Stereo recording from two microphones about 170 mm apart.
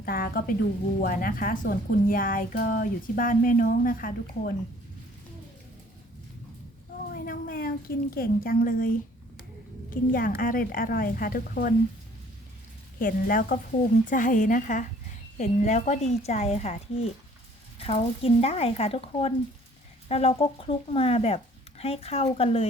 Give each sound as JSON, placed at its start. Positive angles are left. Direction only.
{"t": 0.0, "sound": "speech", "side_deg": 60}
{"t": 7.1, "sound": "a woman's voice", "side_deg": 60}
{"t": 13.0, "sound": "speech", "side_deg": 55}